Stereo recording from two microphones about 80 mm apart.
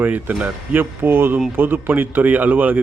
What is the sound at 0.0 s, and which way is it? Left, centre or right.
Speech, right.